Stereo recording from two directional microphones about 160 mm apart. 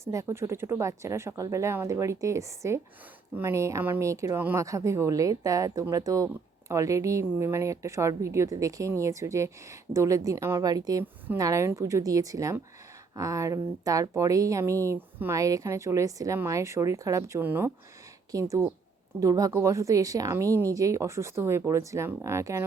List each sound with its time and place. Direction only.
0.0 s speech: 20° right (ahead or behind)